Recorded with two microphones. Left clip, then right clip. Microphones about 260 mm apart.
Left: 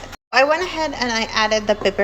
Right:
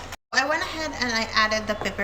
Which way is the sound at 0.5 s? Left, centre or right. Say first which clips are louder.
Left 6 dB; centre.